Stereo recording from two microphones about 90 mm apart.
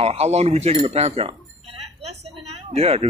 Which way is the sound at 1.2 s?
90° right.